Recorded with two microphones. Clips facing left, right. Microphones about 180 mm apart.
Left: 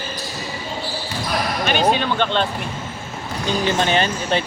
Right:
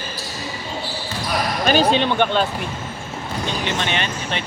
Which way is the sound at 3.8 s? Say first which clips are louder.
Left 5 dB; 35° left (ahead or behind).